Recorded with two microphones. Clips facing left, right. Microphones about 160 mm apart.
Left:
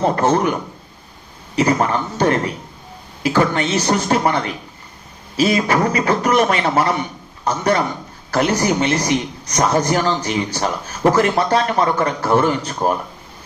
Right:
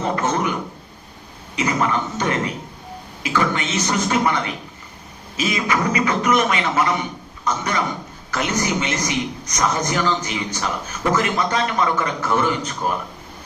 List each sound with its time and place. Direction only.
0.0 s a man's voice: 35° left (ahead or behind)
1.5 s a man's voice: 35° left (ahead or behind)